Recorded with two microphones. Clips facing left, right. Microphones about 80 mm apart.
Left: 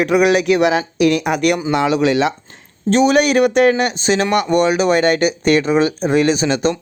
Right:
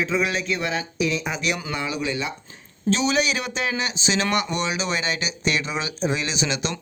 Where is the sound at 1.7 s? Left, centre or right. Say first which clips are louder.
Left 12 dB; left.